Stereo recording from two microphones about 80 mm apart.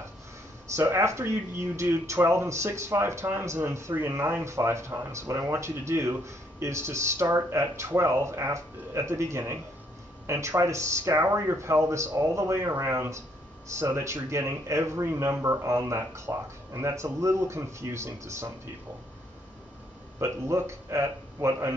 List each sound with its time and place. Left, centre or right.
0.9 s speech: right
4.5 s speech: right
20.2 s speech: right